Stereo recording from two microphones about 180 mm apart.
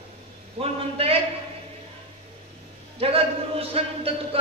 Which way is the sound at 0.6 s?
35° right (ahead or behind).